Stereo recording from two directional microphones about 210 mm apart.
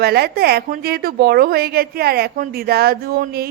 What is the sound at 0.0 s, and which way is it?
A woman's voice, 50° right (ahead or behind).